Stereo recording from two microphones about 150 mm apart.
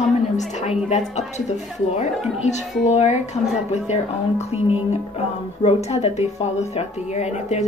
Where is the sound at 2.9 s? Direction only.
50° left (ahead or behind).